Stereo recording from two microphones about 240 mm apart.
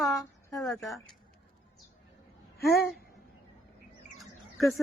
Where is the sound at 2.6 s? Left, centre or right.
Left.